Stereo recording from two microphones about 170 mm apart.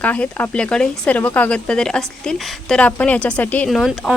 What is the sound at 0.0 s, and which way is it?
A woman's voice, 10° left (ahead or behind).